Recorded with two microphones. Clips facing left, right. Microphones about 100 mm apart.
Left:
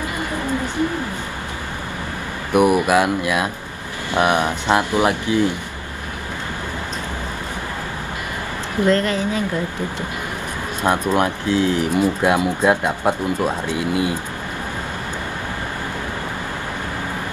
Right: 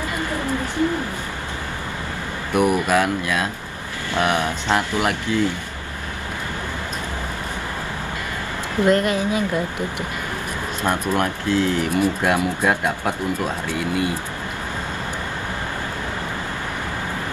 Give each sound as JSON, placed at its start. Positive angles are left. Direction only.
{"t": 2.5, "sound": "speech", "side_deg": 15}
{"t": 8.8, "sound": "a woman's voice", "side_deg": -15}
{"t": 10.8, "sound": "speech", "side_deg": 15}